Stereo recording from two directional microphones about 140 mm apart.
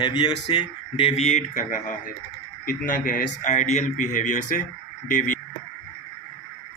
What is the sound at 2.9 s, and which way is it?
Speech, 80° left.